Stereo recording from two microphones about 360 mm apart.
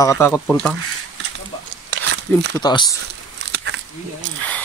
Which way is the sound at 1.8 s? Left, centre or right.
Right.